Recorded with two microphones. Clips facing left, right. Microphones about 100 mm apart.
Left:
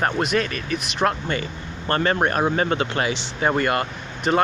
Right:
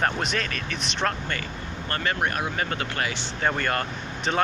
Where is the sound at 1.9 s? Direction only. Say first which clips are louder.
Left 7 dB; 35° left (ahead or behind).